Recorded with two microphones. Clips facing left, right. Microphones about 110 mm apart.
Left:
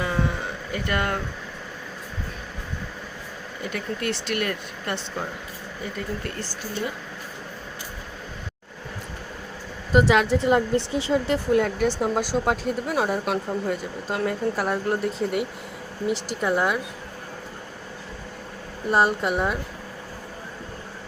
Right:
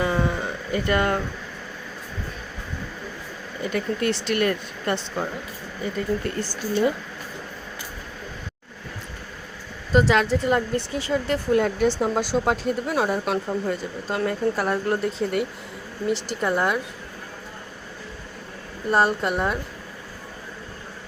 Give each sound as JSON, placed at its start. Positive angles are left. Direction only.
{"t": 0.0, "sound": "a sound", "side_deg": -5}
{"t": 3.6, "sound": "speech", "side_deg": 0}
{"t": 9.9, "sound": "speech", "side_deg": 15}
{"t": 11.5, "sound": "speech", "side_deg": 0}
{"t": 18.9, "sound": "speech", "side_deg": 5}